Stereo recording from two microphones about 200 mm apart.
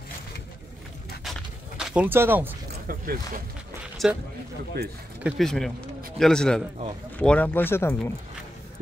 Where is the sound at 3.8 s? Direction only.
5° right (ahead or behind).